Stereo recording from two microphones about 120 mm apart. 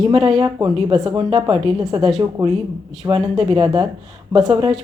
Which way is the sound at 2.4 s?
30° right (ahead or behind).